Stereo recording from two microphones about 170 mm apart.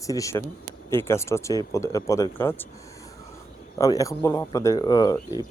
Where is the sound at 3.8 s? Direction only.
20° left (ahead or behind).